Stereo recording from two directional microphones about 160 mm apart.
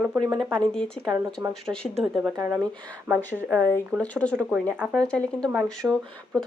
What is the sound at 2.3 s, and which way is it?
Speech, 15° right (ahead or behind).